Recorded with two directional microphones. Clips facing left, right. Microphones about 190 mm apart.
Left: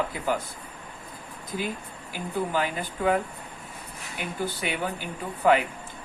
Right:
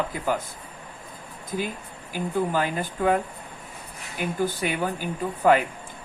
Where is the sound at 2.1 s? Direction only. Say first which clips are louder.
Right 3 dB; 45° right (ahead or behind).